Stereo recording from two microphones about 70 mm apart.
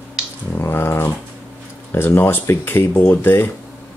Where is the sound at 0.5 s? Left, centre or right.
Left.